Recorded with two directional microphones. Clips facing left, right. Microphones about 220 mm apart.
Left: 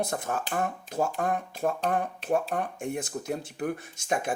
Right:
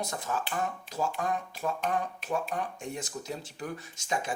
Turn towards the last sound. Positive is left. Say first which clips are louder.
# left 4 dB
turn(degrees=55)  # may be behind; listen again after turning